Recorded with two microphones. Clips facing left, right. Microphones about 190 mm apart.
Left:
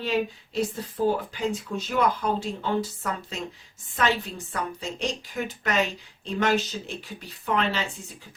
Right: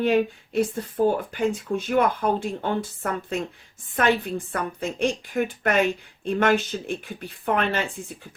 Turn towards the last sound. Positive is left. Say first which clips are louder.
# right 2 dB
turn(degrees=-55)  # may be behind; listen again after turning